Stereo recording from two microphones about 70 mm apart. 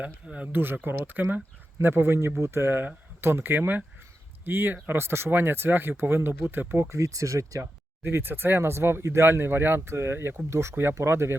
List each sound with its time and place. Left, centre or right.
0.0 s speech: centre; by 7.7 s right
8.0 s speech: right